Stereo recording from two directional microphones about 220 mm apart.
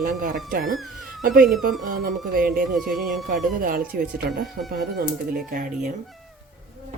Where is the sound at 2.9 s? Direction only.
Centre (ahead or behind).